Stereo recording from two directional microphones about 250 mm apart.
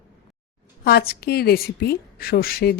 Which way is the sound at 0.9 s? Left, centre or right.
Left.